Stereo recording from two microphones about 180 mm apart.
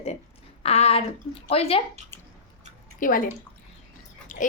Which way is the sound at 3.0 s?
50° left (ahead or behind).